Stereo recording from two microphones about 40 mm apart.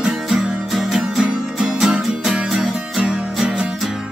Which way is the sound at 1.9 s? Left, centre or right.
Centre.